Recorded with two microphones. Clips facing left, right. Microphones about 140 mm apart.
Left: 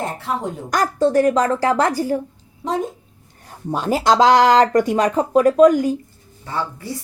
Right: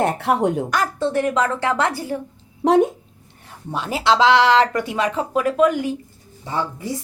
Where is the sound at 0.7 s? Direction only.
40° left (ahead or behind).